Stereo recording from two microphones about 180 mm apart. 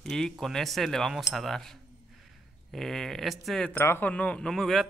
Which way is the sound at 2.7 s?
Centre (ahead or behind).